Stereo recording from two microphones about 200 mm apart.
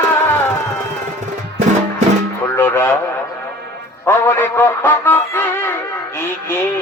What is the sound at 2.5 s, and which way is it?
Radio, 10° left (ahead or behind).